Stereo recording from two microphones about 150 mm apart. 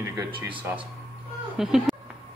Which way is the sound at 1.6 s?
5° right (ahead or behind).